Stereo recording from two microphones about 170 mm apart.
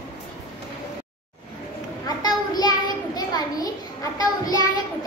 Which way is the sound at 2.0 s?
25° left (ahead or behind).